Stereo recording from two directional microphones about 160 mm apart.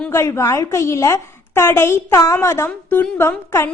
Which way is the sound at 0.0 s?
15° left (ahead or behind).